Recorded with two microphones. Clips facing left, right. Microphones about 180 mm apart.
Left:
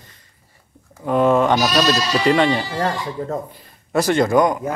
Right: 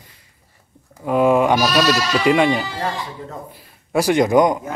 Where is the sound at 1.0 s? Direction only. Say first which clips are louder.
Even; 5° right (ahead or behind).